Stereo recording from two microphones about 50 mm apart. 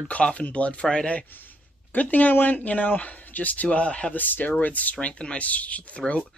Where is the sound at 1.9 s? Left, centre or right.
Left.